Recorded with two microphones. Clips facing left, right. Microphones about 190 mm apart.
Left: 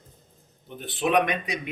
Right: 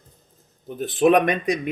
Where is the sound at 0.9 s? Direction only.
45° right (ahead or behind).